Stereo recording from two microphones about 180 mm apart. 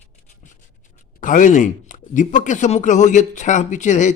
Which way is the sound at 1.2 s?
45° left (ahead or behind).